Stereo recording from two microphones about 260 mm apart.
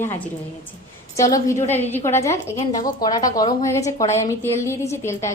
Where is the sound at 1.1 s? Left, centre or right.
Centre.